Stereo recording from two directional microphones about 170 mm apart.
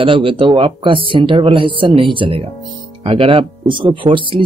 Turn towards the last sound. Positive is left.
turn(degrees=-30)  # may be behind; listen again after turning